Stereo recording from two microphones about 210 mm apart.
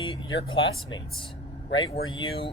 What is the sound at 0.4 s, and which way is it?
Speech, 25° left (ahead or behind).